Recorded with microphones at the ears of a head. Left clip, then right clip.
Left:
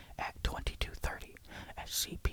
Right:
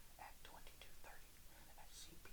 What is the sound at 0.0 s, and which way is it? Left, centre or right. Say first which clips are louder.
Speech: left 19 dB; left.